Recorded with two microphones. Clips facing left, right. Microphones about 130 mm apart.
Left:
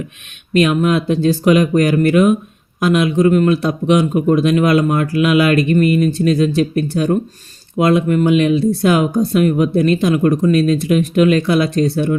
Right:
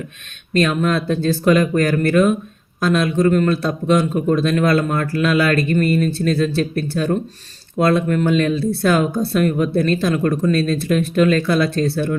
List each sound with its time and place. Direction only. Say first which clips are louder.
0.5 s a man's voice: left 4 dB; 15° left (ahead or behind)